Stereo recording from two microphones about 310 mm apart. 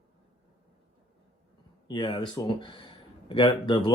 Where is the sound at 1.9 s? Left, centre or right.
Centre.